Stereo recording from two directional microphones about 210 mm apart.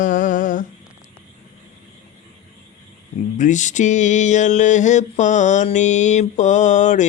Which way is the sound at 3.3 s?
35° left (ahead or behind).